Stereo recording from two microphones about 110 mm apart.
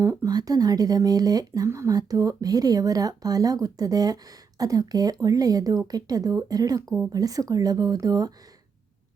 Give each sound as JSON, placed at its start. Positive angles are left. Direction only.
{"t": 0.0, "sound": "speech", "side_deg": -25}